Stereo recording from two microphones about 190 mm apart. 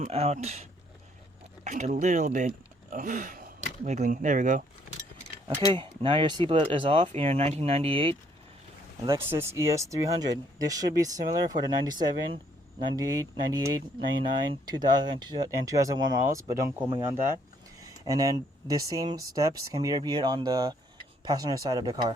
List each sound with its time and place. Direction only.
0.0 s speech: 35° right (ahead or behind)
5.7 s speech: 25° right (ahead or behind)
9.0 s speech: 15° right (ahead or behind)